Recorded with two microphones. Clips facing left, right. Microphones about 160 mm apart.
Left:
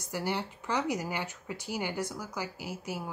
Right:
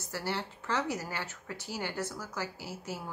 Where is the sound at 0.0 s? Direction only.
15° left (ahead or behind).